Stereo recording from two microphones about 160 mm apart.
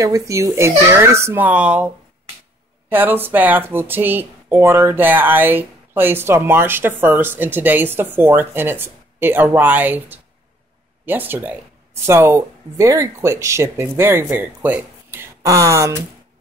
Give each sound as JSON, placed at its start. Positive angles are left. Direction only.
{"t": 0.0, "sound": "speech", "side_deg": -20}
{"t": 2.9, "sound": "speech", "side_deg": -10}